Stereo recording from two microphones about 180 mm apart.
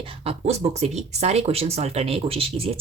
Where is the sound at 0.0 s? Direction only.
30° right (ahead or behind).